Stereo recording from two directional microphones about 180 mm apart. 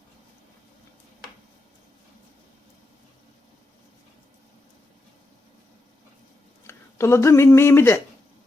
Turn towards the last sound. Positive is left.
turn(degrees=15)  # may be behind; listen again after turning